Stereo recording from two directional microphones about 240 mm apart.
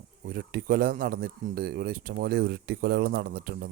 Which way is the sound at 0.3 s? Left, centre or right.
Right.